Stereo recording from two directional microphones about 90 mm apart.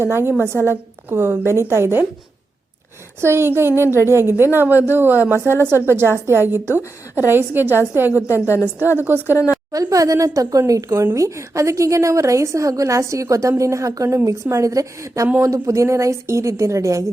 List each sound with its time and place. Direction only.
0.0 s a woman's voice: 25° right (ahead or behind)
3.2 s a woman's voice: 30° right (ahead or behind)
9.7 s a woman's voice: 40° right (ahead or behind)